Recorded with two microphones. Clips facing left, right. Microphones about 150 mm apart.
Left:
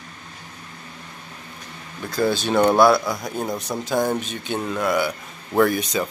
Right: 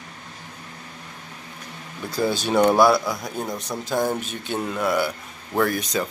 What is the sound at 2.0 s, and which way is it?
Speech, 10° right (ahead or behind).